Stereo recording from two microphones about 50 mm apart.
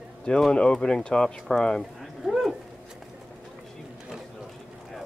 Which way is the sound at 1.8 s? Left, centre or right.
Centre.